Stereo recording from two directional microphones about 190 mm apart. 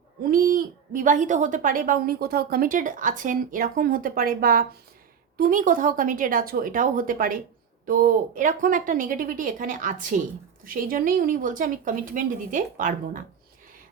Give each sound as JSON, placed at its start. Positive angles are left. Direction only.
{"t": 0.2, "sound": "a woman's voice", "side_deg": -50}